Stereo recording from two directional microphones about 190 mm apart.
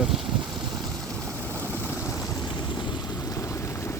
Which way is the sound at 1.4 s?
10° left (ahead or behind).